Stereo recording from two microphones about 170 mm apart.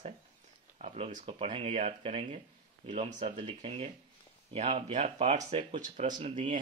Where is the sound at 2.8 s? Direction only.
35° right (ahead or behind).